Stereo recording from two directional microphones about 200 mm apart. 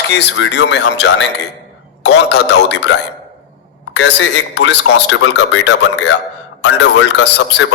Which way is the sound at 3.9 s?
65° left (ahead or behind).